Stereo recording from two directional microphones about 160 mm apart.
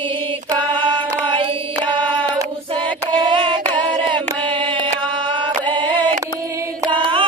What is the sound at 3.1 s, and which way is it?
Child singing, 30° right (ahead or behind).